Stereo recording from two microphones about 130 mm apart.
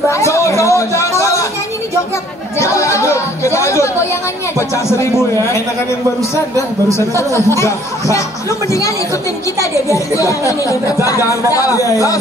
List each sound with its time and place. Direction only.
0.1 s chatter: 20° left (ahead or behind)
2.6 s chatter: 25° left (ahead or behind)
4.6 s speech: 20° left (ahead or behind)
6.3 s speech: 20° left (ahead or behind)
10.2 s speech: 25° left (ahead or behind)